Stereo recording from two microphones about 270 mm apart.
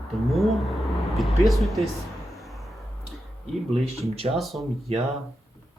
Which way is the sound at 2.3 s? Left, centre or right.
Centre.